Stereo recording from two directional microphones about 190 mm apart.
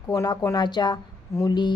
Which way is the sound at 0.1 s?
15° left (ahead or behind).